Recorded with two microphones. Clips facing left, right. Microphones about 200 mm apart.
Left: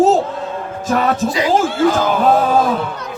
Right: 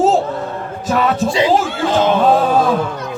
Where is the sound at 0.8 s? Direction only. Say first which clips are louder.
Even; 45° left (ahead or behind).